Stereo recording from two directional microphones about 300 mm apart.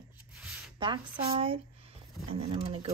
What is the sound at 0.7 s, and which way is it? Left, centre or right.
Speech, centre.